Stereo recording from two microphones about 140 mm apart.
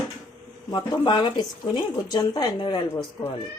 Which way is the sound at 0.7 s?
30° left (ahead or behind).